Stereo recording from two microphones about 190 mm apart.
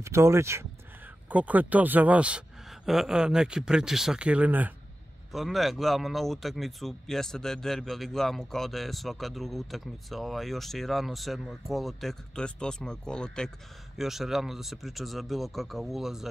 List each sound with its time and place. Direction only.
0.0 s speech: 15° right (ahead or behind)